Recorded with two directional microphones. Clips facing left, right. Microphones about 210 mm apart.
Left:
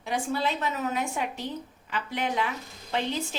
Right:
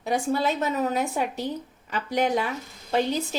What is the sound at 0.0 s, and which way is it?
A woman's voice, 40° right (ahead or behind).